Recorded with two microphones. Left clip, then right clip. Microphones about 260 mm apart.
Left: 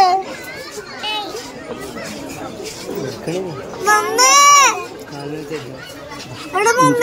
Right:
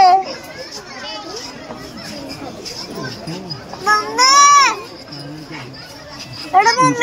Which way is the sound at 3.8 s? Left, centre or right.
Centre.